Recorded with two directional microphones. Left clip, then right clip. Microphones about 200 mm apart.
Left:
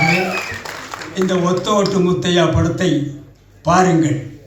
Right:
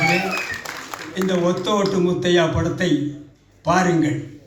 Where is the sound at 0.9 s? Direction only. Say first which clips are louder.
Left 3 dB; 55° right (ahead or behind).